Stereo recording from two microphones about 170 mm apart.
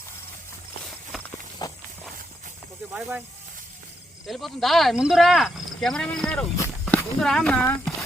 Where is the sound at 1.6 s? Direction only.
25° left (ahead or behind).